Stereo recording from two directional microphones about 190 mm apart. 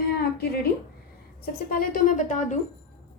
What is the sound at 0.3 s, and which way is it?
Speech, 55° left (ahead or behind).